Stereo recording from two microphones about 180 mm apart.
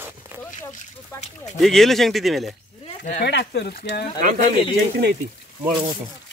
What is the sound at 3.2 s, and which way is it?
Speech, 65° left (ahead or behind).